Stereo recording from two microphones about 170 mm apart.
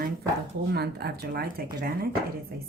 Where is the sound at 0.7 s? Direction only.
70° right (ahead or behind).